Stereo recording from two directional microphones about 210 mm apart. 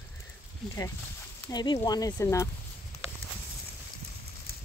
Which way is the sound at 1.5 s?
20° left (ahead or behind).